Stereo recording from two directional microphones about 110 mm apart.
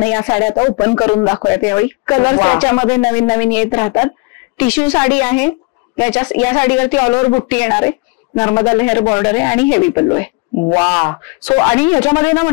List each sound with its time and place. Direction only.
0.0 s speech: 15° left (ahead or behind)